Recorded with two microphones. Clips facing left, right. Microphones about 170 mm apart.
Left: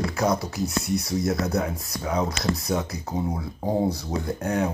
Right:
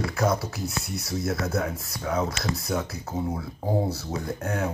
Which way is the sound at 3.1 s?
15° left (ahead or behind).